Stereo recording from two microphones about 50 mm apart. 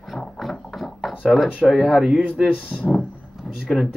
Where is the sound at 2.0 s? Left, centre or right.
Centre.